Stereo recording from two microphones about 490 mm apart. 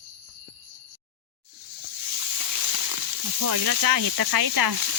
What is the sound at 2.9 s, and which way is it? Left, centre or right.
Speech, right.